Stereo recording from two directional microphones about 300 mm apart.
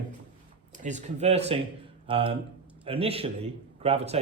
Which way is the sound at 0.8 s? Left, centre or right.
Right.